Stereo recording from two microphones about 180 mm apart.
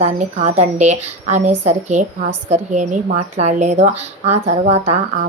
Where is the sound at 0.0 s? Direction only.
40° right (ahead or behind).